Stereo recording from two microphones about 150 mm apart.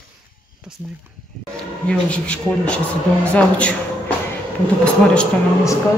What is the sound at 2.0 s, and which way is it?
Speech, 10° left (ahead or behind).